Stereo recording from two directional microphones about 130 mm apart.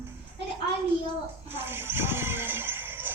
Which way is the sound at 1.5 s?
15° right (ahead or behind).